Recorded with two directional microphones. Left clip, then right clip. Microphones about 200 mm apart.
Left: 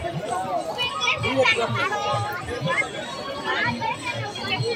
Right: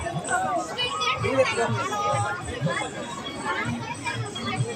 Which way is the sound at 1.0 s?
50° right (ahead or behind).